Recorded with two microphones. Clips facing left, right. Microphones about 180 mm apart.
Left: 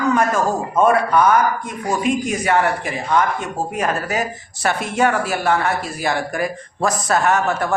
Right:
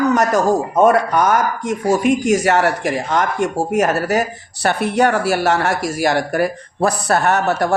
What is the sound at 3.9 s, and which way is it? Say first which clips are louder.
Speech: right 5 dB; 70° right (ahead or behind).